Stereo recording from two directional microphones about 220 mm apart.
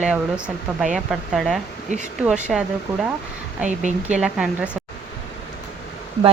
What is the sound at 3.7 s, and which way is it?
Speech, 35° right (ahead or behind).